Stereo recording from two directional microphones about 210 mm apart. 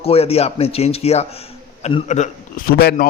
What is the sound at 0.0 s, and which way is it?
A man's voice, 30° left (ahead or behind).